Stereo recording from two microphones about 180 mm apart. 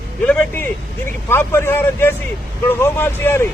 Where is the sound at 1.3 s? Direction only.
15° left (ahead or behind).